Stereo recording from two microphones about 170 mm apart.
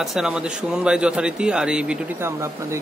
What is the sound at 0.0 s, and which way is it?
A man's voice, 5° right (ahead or behind).